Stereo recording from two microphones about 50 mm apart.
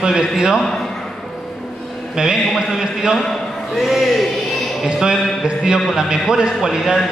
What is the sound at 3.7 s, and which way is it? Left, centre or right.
Speech, centre.